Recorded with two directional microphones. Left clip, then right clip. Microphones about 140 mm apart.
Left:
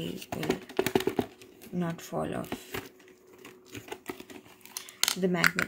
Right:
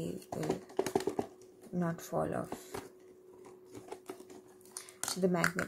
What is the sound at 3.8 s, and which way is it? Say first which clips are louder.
Typewriter: left 7 dB; 50° left (ahead or behind).